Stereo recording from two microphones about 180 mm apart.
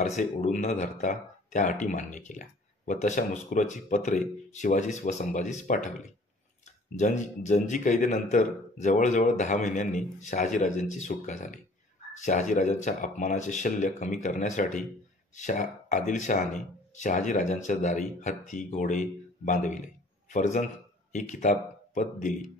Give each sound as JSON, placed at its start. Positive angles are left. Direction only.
{"t": 0.0, "sound": "speech", "side_deg": 40}
{"t": 7.0, "sound": "a man's voice", "side_deg": 40}